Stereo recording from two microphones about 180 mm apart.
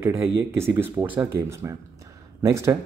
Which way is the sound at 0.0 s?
15° right (ahead or behind).